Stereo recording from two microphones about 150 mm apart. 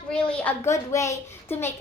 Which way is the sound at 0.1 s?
5° left (ahead or behind).